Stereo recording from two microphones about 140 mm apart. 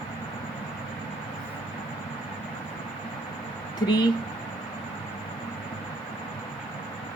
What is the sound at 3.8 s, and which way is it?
Speech, 30° left (ahead or behind).